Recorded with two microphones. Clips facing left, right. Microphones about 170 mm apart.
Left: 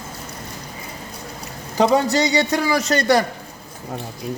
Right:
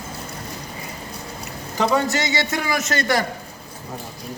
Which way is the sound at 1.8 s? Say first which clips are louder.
Left 4 dB; 35° left (ahead or behind).